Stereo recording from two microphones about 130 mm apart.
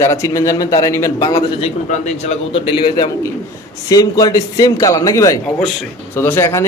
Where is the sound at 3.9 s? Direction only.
25° left (ahead or behind).